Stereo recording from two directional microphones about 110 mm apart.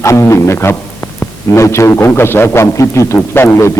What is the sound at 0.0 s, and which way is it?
A man's voice, 25° left (ahead or behind).